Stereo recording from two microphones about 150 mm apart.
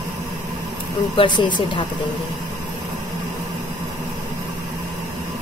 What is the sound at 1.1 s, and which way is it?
Speech, 30° left (ahead or behind).